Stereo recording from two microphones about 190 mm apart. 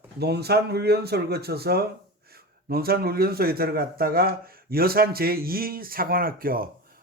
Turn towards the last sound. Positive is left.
turn(degrees=-50)  # may be behind; listen again after turning